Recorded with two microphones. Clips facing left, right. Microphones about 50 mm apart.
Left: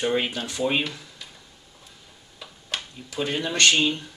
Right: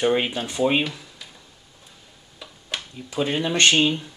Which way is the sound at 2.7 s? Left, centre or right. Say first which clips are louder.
Even; centre.